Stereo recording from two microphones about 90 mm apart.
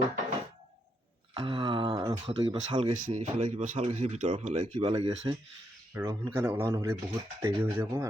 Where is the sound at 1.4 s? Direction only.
70° right (ahead or behind).